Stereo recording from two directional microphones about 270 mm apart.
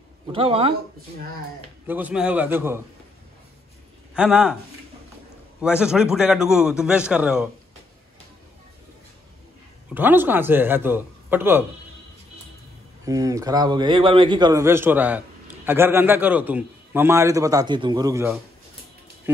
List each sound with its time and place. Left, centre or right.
0.3 s speech: right
1.9 s a man's voice: centre
4.1 s a man's voice: centre
5.6 s a man's voice: centre
9.9 s a man's voice: centre
13.0 s a man's voice: centre